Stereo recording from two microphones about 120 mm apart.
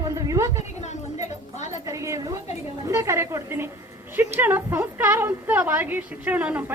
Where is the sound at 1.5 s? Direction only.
75° left (ahead or behind).